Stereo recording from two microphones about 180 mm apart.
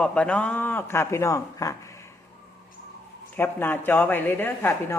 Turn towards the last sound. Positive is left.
turn(degrees=10)  # may be behind; listen again after turning